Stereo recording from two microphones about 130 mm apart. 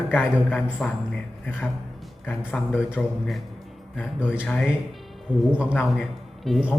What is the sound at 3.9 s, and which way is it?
Speech, 10° right (ahead or behind).